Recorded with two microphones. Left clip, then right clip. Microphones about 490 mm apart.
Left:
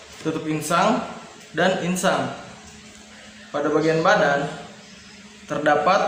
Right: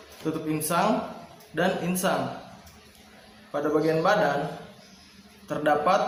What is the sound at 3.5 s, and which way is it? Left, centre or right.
Speech, right.